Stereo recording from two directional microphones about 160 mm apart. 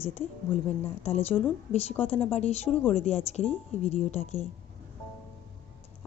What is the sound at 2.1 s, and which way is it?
A woman's voice, 40° left (ahead or behind).